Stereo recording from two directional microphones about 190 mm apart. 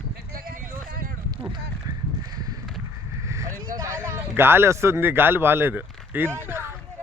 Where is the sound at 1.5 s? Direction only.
20° right (ahead or behind).